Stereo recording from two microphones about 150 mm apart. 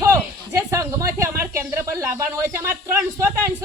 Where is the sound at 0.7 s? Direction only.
20° right (ahead or behind).